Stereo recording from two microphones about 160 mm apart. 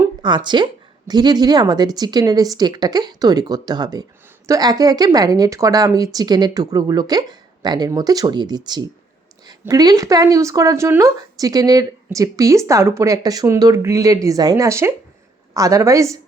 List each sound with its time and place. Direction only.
0.2 s speech: 30° right (ahead or behind)